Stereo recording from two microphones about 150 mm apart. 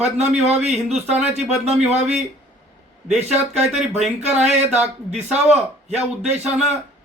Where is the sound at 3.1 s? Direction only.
45° right (ahead or behind).